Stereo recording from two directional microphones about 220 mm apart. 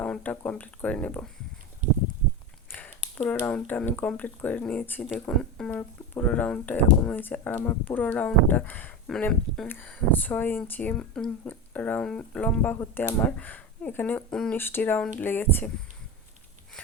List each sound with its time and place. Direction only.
0.0 s speech: 5° left (ahead or behind)
2.7 s speech: 5° left (ahead or behind)